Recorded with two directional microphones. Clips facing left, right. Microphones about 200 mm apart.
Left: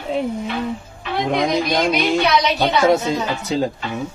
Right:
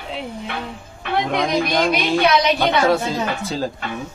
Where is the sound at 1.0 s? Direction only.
60° right (ahead or behind).